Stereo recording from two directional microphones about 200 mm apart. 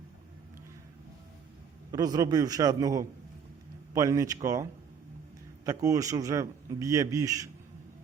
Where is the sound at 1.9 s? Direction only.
20° right (ahead or behind).